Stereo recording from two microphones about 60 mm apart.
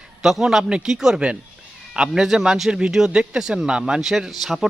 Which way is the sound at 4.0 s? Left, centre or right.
Centre.